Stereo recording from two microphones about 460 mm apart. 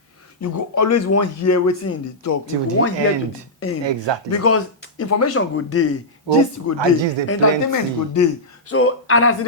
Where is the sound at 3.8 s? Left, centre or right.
Right.